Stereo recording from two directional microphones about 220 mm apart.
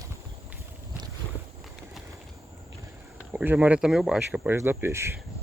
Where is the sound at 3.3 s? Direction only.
5° right (ahead or behind).